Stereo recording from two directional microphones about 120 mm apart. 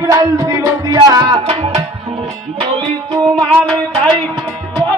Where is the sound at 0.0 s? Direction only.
30° right (ahead or behind).